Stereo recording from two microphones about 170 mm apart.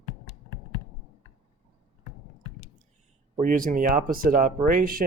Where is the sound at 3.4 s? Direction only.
55° right (ahead or behind).